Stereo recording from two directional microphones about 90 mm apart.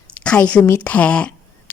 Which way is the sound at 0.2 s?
10° left (ahead or behind).